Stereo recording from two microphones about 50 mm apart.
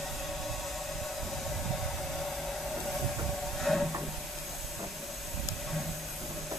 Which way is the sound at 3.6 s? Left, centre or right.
Centre.